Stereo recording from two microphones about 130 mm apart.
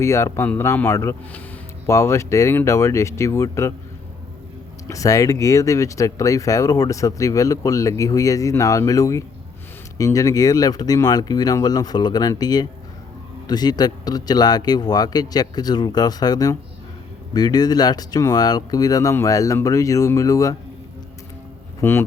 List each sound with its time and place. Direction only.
0.0 s speech: 20° left (ahead or behind)
4.9 s speech: 25° left (ahead or behind)
21.8 s speech: 20° left (ahead or behind)